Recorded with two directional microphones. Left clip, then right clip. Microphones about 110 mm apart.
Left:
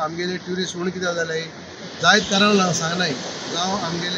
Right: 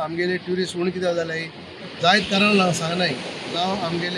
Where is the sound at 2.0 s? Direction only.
15° right (ahead or behind).